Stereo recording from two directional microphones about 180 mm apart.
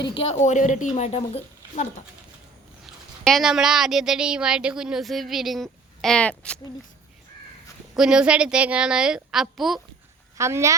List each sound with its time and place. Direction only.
0.2 s speech: 40° left (ahead or behind)
2.8 s a woman's voice: centre (ahead or behind)
7.9 s a woman's voice: 5° right (ahead or behind)
10.3 s speech: 15° right (ahead or behind)